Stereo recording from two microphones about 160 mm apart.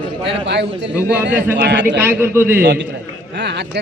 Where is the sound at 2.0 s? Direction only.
15° right (ahead or behind).